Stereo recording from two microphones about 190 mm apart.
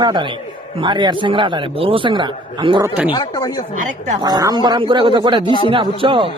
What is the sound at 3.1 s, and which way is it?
Speech, 20° left (ahead or behind).